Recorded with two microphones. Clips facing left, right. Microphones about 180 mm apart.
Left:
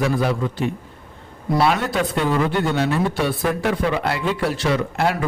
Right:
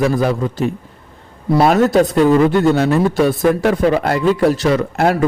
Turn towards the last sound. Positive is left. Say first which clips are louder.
# right 5 dB
turn(degrees=-45)  # may be behind; listen again after turning